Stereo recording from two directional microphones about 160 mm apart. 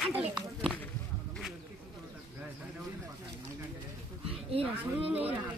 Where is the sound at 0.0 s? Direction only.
5° right (ahead or behind).